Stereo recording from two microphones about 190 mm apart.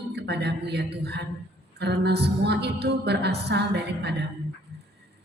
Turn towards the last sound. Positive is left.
turn(degrees=-60)  # may be behind; listen again after turning